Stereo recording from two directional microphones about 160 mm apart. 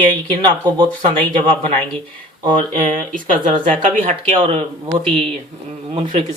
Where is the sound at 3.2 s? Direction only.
55° right (ahead or behind).